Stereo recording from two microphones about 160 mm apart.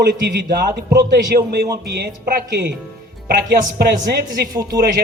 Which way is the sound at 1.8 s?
85° right.